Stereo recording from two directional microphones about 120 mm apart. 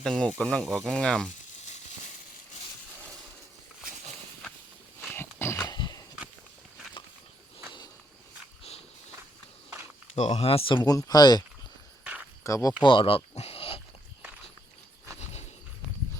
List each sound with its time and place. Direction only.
0.0 s speech: 5° left (ahead or behind)
5.1 s dog: 20° left (ahead or behind)
5.6 s dog: 35° left (ahead or behind)
10.2 s speech: 70° left (ahead or behind); by 10.8 s 50° left (ahead or behind)
10.8 s speech: 30° left (ahead or behind)
12.8 s a sound: 45° left (ahead or behind)
15.2 s wild animals: 65° left (ahead or behind)